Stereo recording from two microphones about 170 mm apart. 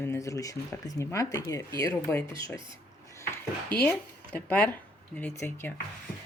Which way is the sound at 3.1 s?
15° left (ahead or behind).